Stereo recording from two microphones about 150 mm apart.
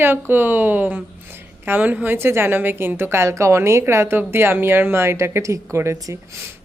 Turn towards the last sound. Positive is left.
turn(degrees=-20)  # may be behind; listen again after turning